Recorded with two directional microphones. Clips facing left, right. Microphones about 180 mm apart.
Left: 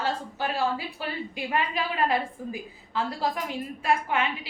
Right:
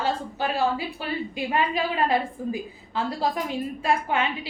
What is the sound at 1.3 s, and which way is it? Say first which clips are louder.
A woman's voice: right 3 dB; 25° right (ahead or behind).